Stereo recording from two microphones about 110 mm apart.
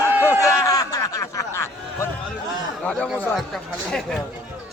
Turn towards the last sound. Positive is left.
turn(degrees=5)  # may be behind; listen again after turning